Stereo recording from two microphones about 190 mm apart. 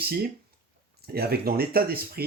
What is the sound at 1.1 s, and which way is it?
Speech, 55° right (ahead or behind).